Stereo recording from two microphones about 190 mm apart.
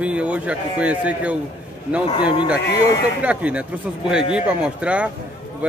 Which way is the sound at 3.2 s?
5° right (ahead or behind).